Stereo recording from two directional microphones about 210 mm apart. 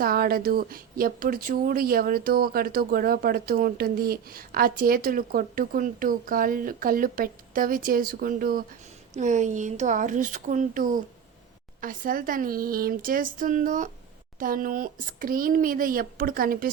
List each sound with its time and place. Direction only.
0.0 s a woman's voice: 45° right (ahead or behind)